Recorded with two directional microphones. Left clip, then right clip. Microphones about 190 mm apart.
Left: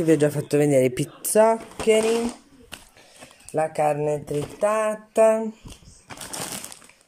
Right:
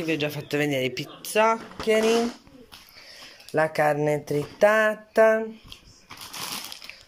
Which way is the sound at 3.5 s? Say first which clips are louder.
Even; 5° left (ahead or behind).